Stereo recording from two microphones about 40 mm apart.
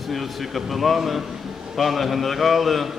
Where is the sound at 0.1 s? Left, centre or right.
Centre.